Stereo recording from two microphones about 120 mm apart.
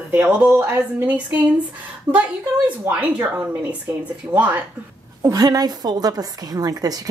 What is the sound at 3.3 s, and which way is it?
Speech, 15° right (ahead or behind).